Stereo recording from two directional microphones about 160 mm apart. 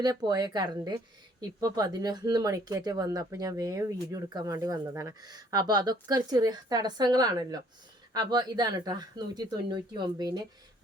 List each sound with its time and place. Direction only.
0.0 s speech: 25° right (ahead or behind)